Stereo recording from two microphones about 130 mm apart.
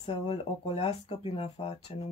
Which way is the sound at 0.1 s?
45° left (ahead or behind).